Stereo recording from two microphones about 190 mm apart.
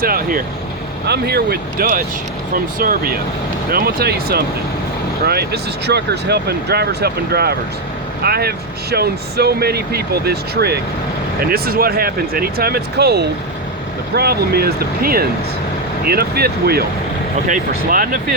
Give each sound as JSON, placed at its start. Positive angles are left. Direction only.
{"t": 0.0, "sound": "speech", "side_deg": -50}
{"t": 1.0, "sound": "speech", "side_deg": -60}